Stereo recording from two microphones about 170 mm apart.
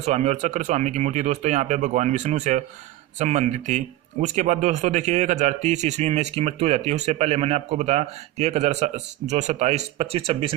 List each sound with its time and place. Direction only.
0.0 s speech: 40° right (ahead or behind)